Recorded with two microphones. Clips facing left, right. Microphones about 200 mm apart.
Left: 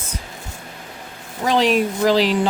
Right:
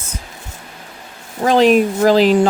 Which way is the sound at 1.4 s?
45° right (ahead or behind).